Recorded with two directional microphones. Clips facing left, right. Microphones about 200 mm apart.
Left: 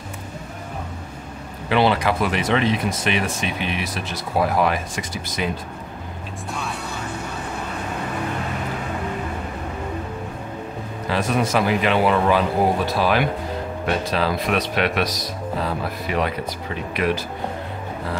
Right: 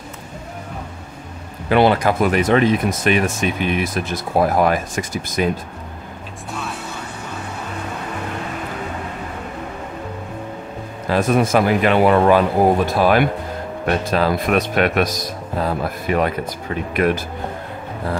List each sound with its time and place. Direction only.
1.7 s speech: 50° right (ahead or behind)
6.5 s vehicle: centre (ahead or behind)
11.1 s speech: 50° right (ahead or behind)